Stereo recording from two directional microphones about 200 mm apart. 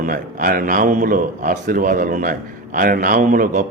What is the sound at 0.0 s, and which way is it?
A man's voice, 45° right (ahead or behind).